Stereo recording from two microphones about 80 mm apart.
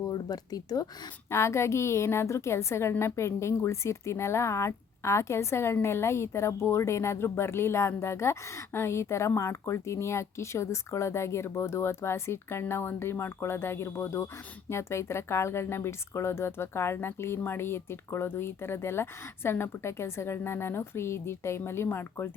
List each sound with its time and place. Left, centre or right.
0.0 s speech: left
1.3 s speech: left